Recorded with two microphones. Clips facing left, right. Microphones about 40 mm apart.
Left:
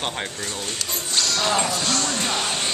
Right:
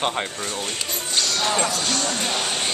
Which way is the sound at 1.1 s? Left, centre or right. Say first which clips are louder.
Left 1 dB; centre.